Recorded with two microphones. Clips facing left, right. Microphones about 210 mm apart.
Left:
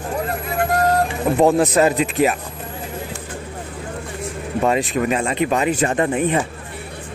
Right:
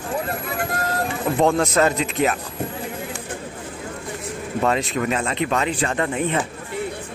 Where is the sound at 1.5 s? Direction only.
15° left (ahead or behind).